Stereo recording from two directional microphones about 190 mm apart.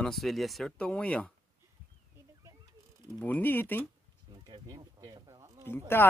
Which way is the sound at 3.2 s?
10° left (ahead or behind).